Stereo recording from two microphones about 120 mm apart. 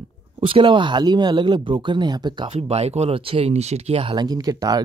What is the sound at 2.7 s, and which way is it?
Speech, 60° right (ahead or behind).